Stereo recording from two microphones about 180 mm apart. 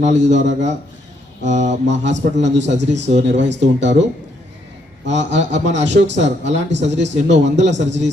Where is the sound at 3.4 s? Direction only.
75° right (ahead or behind).